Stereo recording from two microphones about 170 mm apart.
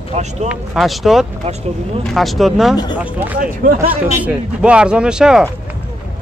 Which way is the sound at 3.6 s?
55° right (ahead or behind).